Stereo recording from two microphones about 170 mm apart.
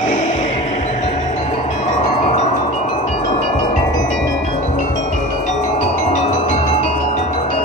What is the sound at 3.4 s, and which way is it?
Wind chime, 45° left (ahead or behind).